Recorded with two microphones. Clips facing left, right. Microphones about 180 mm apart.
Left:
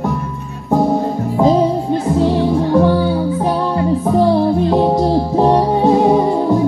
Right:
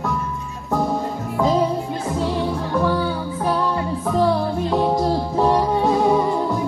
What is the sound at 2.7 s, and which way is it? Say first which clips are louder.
Music: left 6 dB; 30° left (ahead or behind).